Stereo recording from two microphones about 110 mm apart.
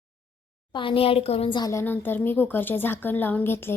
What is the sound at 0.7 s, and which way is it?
Speech, 50° left (ahead or behind).